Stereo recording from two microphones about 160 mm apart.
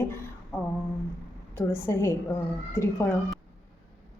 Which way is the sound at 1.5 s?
15° left (ahead or behind).